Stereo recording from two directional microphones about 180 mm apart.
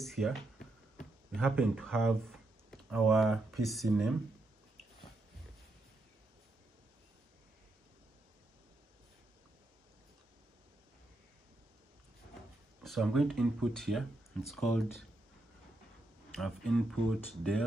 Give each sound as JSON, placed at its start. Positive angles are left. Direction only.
{"t": 0.0, "sound": "a sound", "side_deg": 0}
{"t": 1.3, "sound": "speech", "side_deg": 0}
{"t": 12.8, "sound": "speech", "side_deg": 0}
{"t": 16.3, "sound": "speech", "side_deg": 0}